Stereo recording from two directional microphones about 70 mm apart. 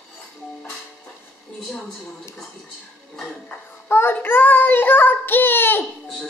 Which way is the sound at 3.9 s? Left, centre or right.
Left.